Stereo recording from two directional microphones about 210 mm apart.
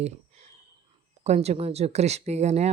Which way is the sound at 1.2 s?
30° right (ahead or behind).